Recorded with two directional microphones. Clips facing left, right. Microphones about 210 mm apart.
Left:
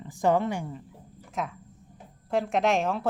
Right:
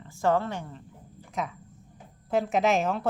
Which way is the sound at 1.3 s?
Centre (ahead or behind).